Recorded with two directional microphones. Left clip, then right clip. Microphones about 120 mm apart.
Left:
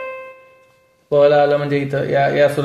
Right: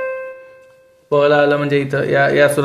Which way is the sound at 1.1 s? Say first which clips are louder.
Even; 20° right (ahead or behind).